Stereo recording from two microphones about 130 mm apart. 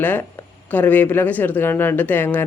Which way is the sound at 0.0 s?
15° left (ahead or behind).